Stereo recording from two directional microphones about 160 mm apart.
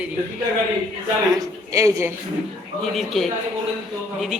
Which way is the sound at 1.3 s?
20° right (ahead or behind).